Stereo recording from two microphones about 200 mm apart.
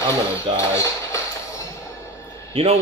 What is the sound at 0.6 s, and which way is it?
Basketball bounce, 15° left (ahead or behind).